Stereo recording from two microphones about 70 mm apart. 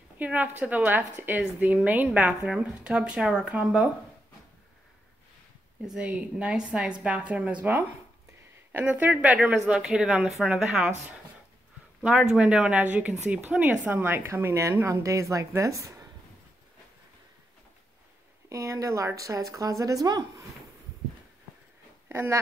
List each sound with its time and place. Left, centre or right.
0.2 s a woman's voice: right
2.4 s a woman's voice: centre
5.9 s a woman's voice: centre
8.8 s a woman's voice: right
9.7 s a woman's voice: centre; by 16.1 s right
18.5 s speech: right
22.1 s speech: right